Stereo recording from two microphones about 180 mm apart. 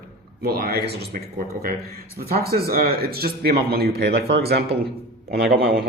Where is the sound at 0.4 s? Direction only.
60° right (ahead or behind).